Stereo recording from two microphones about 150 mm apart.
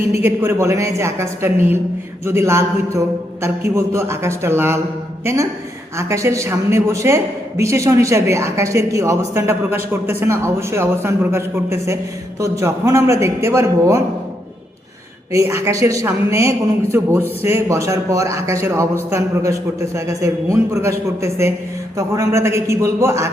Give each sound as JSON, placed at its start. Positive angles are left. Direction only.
{"t": 0.2, "sound": "a woman's voice", "side_deg": -15}
{"t": 15.3, "sound": "a woman's voice", "side_deg": -20}